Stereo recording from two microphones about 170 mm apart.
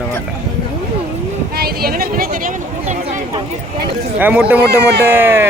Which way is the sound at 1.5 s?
65° right (ahead or behind).